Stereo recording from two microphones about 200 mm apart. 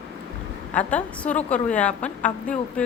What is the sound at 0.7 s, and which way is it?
A woman's voice, 5° left (ahead or behind).